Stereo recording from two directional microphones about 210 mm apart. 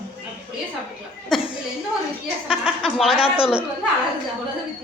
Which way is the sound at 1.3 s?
Centre (ahead or behind).